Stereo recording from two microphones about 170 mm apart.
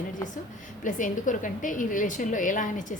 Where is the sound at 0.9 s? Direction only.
50° left (ahead or behind).